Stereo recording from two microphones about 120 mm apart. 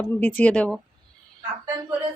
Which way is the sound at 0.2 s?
15° left (ahead or behind).